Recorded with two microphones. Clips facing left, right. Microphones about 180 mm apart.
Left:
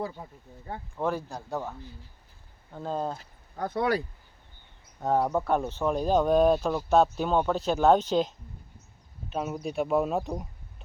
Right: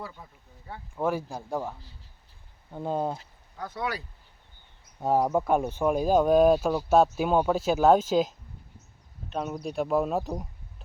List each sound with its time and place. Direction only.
0.0 s speech: 40° left (ahead or behind)
0.9 s speech: 10° right (ahead or behind)
2.7 s speech: 15° right (ahead or behind)
3.5 s speech: 50° left (ahead or behind)
4.9 s speech: 10° right (ahead or behind)
9.3 s speech: 5° left (ahead or behind)